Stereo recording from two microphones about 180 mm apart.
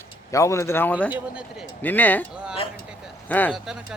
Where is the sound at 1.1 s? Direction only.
5° right (ahead or behind).